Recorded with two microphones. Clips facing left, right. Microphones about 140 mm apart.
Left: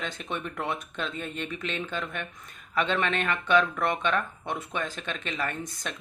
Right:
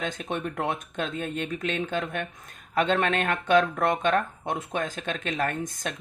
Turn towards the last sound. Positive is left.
turn(degrees=-50)  # may be behind; listen again after turning